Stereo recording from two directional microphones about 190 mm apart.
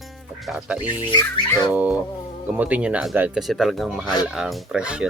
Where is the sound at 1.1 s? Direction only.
15° left (ahead or behind).